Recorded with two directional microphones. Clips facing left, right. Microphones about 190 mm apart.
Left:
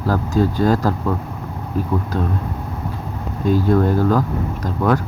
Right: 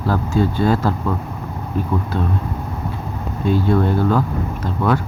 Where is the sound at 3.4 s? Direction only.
40° left (ahead or behind).